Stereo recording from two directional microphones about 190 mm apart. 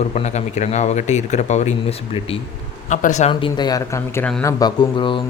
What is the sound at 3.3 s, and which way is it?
A man's voice, 25° left (ahead or behind).